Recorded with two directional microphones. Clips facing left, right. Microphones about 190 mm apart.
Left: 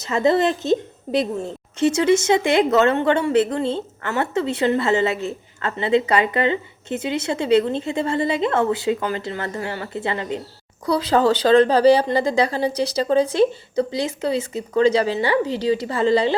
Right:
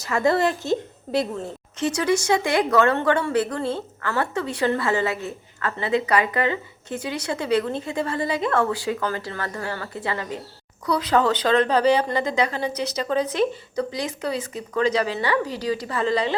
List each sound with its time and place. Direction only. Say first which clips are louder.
0.0 s a woman's voice: left 3 dB; 20° left (ahead or behind)